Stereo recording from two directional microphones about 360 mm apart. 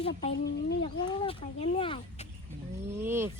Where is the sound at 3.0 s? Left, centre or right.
Centre.